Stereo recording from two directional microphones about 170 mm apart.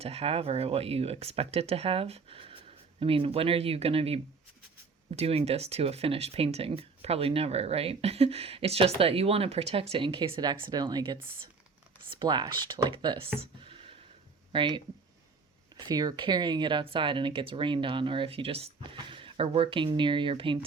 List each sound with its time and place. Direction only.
0.0 s speech: 35° right (ahead or behind)
13.4 s a sound: 35° right (ahead or behind)
14.5 s speech: 30° right (ahead or behind)
15.8 s speech: 25° right (ahead or behind)